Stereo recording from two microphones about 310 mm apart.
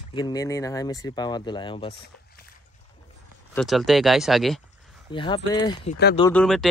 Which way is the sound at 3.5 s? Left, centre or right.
Centre.